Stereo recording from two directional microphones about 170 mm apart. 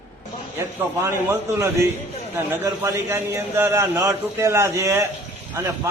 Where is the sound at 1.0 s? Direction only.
15° right (ahead or behind).